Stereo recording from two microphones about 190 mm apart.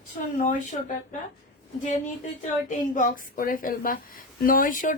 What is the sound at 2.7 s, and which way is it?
Speech, 45° left (ahead or behind).